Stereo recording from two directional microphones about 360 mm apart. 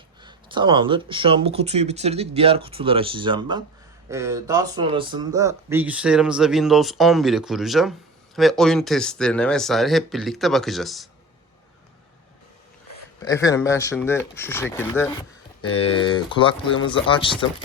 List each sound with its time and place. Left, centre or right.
0.2 s speech: centre
12.9 s speech: centre